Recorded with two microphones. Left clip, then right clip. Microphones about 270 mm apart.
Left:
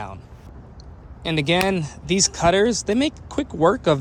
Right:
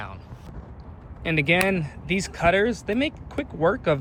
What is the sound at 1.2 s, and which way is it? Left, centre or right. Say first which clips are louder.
Speech: left 1 dB; centre.